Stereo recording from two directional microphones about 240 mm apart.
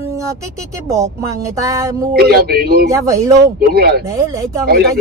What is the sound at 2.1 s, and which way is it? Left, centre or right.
Speech, right.